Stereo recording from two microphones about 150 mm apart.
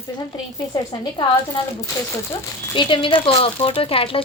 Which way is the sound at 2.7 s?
35° left (ahead or behind).